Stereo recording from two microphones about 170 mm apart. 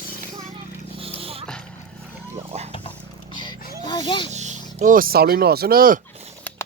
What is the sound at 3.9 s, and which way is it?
Speech, 30° left (ahead or behind).